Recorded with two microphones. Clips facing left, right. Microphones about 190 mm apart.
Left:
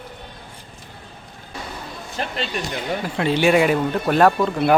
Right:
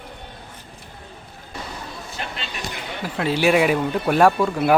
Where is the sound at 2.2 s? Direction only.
40° left (ahead or behind).